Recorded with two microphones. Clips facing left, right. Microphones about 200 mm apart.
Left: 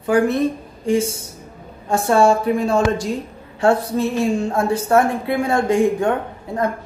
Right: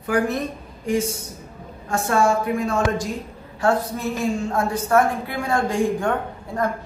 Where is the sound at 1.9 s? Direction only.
30° left (ahead or behind).